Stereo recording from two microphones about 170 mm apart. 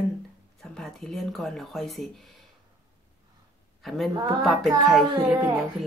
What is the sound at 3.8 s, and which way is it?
A woman's voice, centre (ahead or behind).